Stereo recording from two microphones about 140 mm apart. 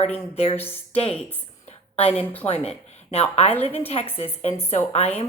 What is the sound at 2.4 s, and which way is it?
A woman's voice, 45° left (ahead or behind).